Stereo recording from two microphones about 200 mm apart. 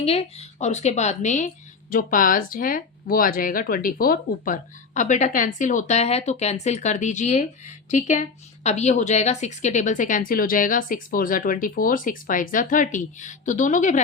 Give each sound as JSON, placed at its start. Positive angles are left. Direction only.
{"t": 0.0, "sound": "speech", "side_deg": 30}